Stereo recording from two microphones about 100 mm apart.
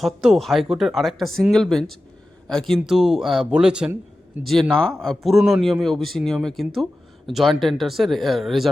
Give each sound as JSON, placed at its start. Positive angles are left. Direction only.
{"t": 0.0, "sound": "speech", "side_deg": 0}
{"t": 4.9, "sound": "speech", "side_deg": 0}